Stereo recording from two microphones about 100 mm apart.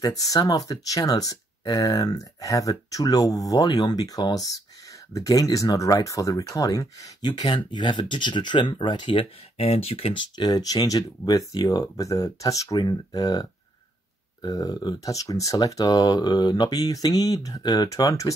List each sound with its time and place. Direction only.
0.0 s speech: 35° left (ahead or behind); by 9.2 s 55° left (ahead or behind)
9.6 s speech: 90° left
10.1 s speech: 45° left (ahead or behind)